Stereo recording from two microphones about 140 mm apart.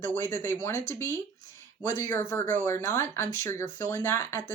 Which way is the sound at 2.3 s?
65° right (ahead or behind).